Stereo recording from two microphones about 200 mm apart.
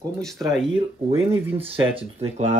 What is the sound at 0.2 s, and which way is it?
Speech, centre (ahead or behind).